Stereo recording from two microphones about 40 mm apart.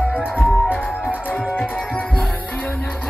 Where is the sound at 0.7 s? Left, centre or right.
Left.